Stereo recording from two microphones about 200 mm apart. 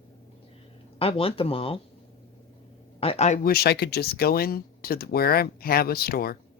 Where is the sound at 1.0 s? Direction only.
30° left (ahead or behind).